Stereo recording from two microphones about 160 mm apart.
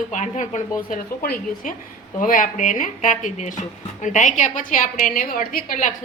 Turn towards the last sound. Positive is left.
turn(degrees=55)  # may be behind; listen again after turning